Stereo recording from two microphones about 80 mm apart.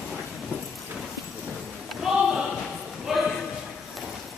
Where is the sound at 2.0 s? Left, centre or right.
Centre.